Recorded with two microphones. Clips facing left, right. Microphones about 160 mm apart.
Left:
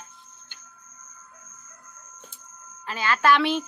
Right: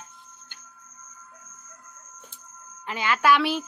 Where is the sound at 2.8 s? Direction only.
15° right (ahead or behind).